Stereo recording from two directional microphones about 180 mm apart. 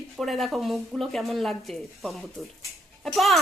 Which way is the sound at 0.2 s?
Centre (ahead or behind).